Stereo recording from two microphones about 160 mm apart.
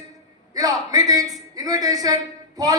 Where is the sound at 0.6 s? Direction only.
20° right (ahead or behind).